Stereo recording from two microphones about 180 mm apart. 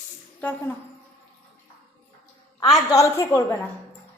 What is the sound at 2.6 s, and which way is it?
Speech, 20° left (ahead or behind).